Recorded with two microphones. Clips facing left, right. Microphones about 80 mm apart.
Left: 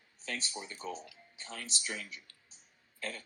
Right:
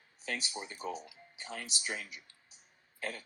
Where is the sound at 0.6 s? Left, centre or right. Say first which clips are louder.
Right 2 dB; centre.